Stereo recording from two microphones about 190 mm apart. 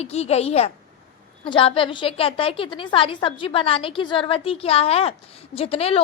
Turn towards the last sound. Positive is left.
turn(degrees=30)  # may be behind; listen again after turning